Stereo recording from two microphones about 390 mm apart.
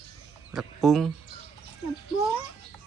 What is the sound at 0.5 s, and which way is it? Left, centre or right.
Speech, centre.